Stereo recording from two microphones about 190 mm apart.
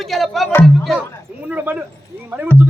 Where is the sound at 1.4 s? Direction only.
10° right (ahead or behind).